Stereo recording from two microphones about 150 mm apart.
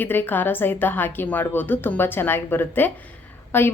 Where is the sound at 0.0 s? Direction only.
15° left (ahead or behind).